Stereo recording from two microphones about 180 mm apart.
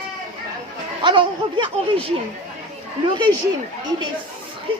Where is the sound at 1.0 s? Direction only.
25° right (ahead or behind).